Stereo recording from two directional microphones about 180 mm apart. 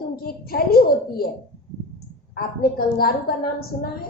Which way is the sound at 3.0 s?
55° left (ahead or behind).